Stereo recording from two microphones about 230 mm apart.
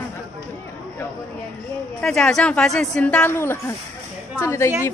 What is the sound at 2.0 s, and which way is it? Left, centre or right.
A woman's voice, centre.